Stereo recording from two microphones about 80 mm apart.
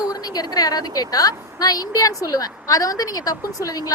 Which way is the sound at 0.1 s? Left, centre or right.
Left.